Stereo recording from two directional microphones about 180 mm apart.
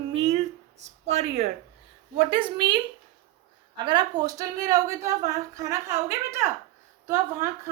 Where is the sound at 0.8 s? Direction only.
40° right (ahead or behind).